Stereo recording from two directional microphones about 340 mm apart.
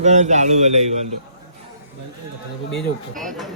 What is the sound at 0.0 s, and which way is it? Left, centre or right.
Speech, centre.